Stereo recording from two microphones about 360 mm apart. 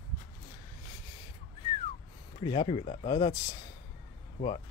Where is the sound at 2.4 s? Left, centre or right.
Centre.